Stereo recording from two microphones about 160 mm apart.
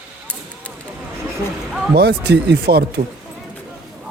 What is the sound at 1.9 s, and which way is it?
Speech, 90° right.